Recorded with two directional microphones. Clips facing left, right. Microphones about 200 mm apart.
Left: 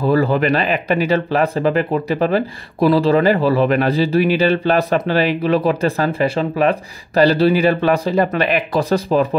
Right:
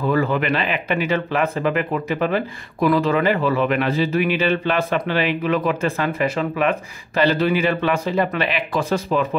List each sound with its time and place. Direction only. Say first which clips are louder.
0.0 s speech: left 4 dB; 35° left (ahead or behind)